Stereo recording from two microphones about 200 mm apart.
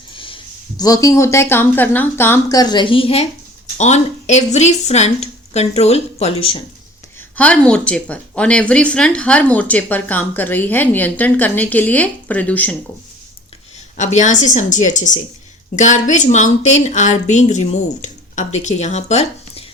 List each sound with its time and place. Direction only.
0.1 s a sound: 25° left (ahead or behind)
0.8 s a woman's voice: 20° left (ahead or behind)
7.3 s speech: 5° left (ahead or behind)
13.9 s a woman's voice: 35° left (ahead or behind)